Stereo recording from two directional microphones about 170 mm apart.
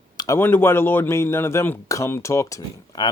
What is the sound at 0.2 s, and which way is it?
Speech, 15° left (ahead or behind).